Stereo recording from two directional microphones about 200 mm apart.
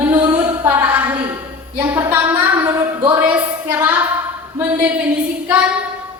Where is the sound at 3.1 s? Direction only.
10° right (ahead or behind).